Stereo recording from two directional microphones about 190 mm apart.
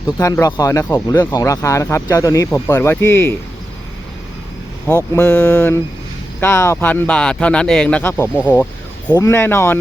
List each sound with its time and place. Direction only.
0.2 s speech: 15° left (ahead or behind)
5.1 s speech: 10° left (ahead or behind)